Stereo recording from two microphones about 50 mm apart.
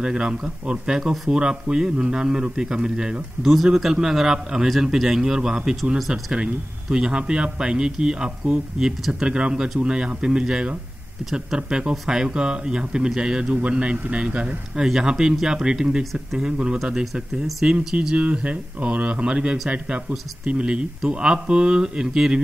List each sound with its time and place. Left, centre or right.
0.0 s speech: centre
5.9 s speech: centre
6.3 s speech: centre
16.0 s speech: centre
17.6 s speech: right